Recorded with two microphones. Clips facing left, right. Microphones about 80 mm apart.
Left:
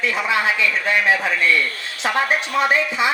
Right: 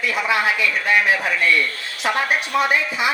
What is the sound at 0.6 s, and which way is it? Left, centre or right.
A woman's voice, left.